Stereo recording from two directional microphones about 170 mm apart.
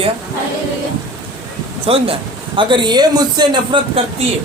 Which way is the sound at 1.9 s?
35° right (ahead or behind).